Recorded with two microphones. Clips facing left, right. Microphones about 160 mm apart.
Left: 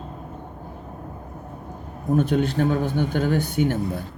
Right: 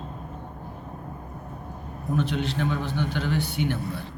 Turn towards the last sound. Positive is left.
turn(degrees=45)  # may be behind; listen again after turning